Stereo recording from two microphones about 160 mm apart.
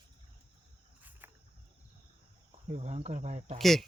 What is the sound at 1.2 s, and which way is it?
Cricket, 15° right (ahead or behind).